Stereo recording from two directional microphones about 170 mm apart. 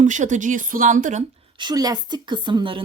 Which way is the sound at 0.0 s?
45° right (ahead or behind).